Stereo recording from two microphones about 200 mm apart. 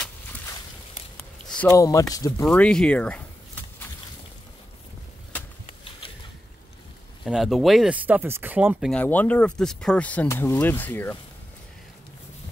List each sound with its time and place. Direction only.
1.1 s a sound: 5° left (ahead or behind)
1.7 s speech: 15° left (ahead or behind)
2.4 s a sound: 5° left (ahead or behind)
5.7 s mechanisms: 25° left (ahead or behind)
7.2 s speech: centre (ahead or behind)
8.9 s speech: 10° left (ahead or behind)